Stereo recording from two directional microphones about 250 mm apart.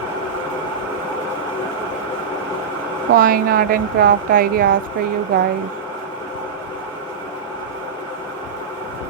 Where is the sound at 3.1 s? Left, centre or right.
Right.